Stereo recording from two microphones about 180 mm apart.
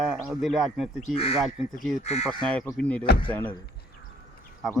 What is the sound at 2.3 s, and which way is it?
Speech, 5° left (ahead or behind).